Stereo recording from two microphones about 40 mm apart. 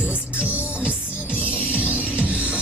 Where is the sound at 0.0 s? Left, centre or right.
Right.